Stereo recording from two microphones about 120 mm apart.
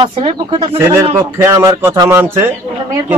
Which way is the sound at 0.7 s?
20° right (ahead or behind).